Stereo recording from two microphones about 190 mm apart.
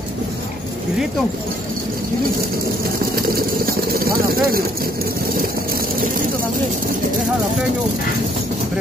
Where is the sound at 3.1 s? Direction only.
50° right (ahead or behind).